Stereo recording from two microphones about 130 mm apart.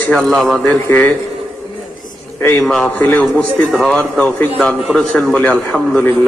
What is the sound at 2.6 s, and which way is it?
A man's voice, 5° left (ahead or behind).